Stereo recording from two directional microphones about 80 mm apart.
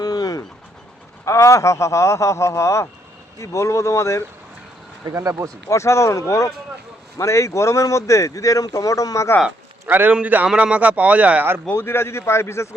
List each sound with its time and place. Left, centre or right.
0.0 s bird: left
1.2 s speech: left
5.1 s a man's voice: right
5.6 s speech: left
9.9 s a man's voice: right
11.7 s speech: left